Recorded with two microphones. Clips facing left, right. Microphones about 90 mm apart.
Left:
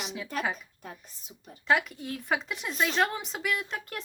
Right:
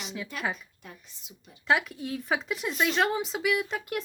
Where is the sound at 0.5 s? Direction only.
40° left (ahead or behind).